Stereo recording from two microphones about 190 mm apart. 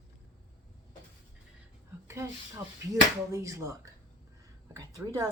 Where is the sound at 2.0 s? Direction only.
15° right (ahead or behind).